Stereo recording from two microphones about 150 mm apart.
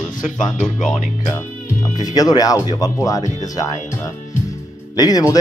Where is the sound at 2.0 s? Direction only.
25° left (ahead or behind).